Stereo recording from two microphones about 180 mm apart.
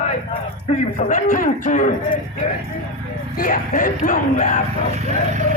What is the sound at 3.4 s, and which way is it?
Speech, 45° left (ahead or behind).